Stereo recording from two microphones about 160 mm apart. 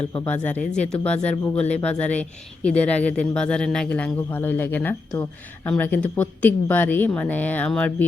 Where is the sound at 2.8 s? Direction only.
10° left (ahead or behind).